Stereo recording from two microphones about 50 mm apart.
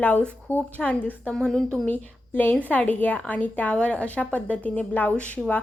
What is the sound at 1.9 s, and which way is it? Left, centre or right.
A woman's voice, left.